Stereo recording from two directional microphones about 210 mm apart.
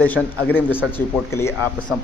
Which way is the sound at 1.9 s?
10° right (ahead or behind).